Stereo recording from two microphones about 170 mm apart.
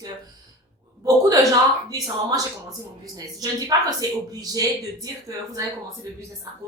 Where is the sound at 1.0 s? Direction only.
20° right (ahead or behind).